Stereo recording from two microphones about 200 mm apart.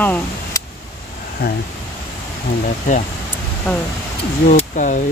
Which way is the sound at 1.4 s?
50° left (ahead or behind).